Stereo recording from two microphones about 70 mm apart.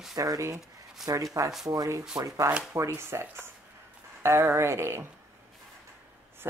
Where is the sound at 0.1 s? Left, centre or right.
Right.